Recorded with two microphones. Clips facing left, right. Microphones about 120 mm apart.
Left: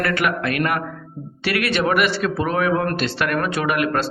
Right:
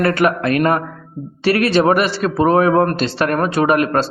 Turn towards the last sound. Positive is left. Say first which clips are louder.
# right 6 dB
turn(degrees=-35)  # may be behind; listen again after turning